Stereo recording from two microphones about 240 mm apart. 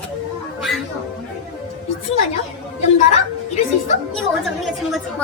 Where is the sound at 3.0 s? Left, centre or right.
Left.